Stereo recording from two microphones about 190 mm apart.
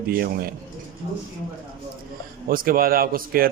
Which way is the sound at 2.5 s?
50° right (ahead or behind).